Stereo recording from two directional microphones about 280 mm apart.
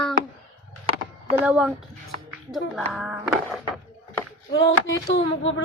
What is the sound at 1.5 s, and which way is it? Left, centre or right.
Speech, centre.